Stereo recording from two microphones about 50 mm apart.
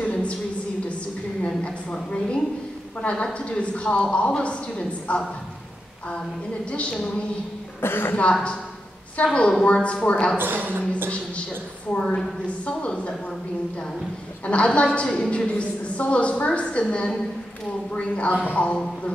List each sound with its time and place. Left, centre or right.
0.0 s a sound: left
1.4 s a sound: left
3.0 s a woman's voice: left
7.8 s a woman's voice: left
8.2 s a woman's voice: left
10.3 s a woman's voice: right
12.6 s a woman's voice: left
14.4 s a woman's voice: left